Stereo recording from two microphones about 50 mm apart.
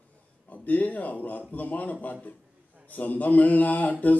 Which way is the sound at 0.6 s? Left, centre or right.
Left.